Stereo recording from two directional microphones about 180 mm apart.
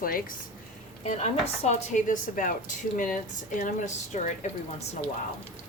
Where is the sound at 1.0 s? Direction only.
35° left (ahead or behind).